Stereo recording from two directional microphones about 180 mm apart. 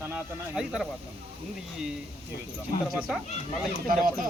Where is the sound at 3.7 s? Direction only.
50° right (ahead or behind).